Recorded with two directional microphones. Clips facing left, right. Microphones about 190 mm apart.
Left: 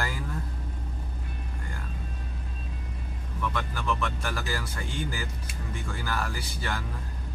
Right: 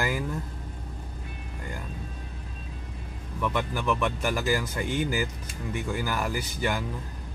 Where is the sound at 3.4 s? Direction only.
15° right (ahead or behind).